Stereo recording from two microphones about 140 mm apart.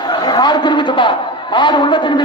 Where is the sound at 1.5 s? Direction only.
35° left (ahead or behind).